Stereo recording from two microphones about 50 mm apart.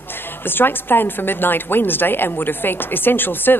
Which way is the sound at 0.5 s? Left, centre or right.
Left.